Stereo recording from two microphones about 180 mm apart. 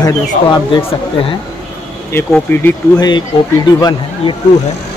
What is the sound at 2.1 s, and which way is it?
Speech, 10° left (ahead or behind).